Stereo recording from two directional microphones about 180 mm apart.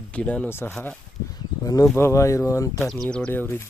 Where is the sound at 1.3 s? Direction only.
20° left (ahead or behind).